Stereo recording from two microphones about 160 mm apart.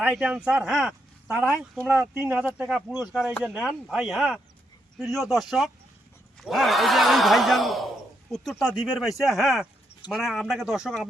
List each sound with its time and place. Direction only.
0.0 s speech: 10° right (ahead or behind)